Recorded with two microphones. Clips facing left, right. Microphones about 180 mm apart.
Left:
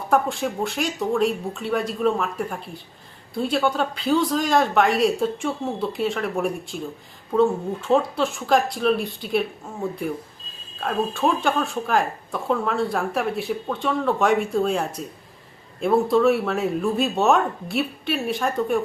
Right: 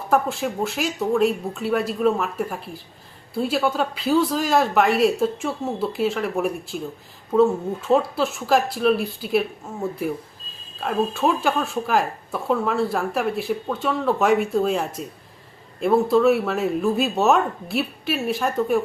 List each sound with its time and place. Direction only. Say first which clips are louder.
0.1 s speech: even; centre (ahead or behind)